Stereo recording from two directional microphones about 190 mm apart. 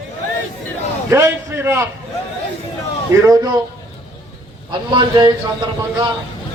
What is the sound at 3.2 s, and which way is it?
Speech, 20° right (ahead or behind).